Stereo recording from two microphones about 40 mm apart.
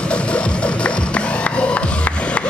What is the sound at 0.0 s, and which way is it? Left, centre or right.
Music, left.